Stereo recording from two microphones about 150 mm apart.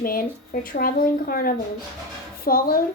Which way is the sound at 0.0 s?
75° left (ahead or behind).